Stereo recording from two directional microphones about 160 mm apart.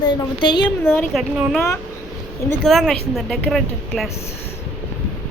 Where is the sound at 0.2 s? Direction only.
30° left (ahead or behind).